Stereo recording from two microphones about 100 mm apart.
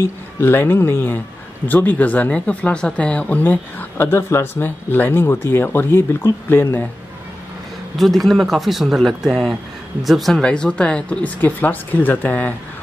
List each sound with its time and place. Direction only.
0.0 s speech: 25° left (ahead or behind)
8.0 s speech: centre (ahead or behind)